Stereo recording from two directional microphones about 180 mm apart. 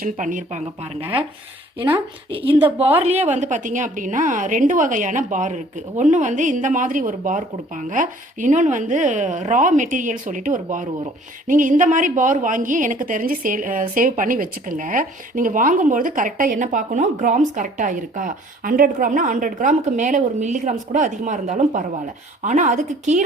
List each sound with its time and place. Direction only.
0.0 s speech: 45° right (ahead or behind)
2.3 s a woman's voice: 30° right (ahead or behind)